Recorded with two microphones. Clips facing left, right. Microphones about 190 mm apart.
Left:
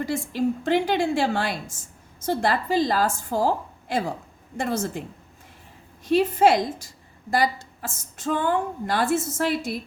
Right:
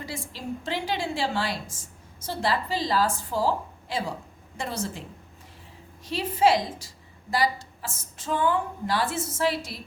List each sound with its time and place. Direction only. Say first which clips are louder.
0.0 s a woman's voice: left 11 dB; 55° left (ahead or behind)
6.1 s a woman's voice: left 4 dB; 50° left (ahead or behind)